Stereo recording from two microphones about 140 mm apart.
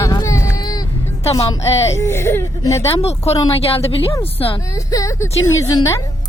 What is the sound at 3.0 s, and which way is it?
Speech, 50° left (ahead or behind).